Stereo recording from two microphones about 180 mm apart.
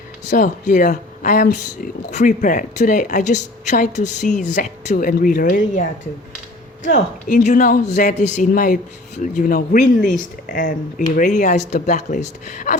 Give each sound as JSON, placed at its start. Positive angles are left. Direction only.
{"t": 0.3, "sound": "speech", "side_deg": 45}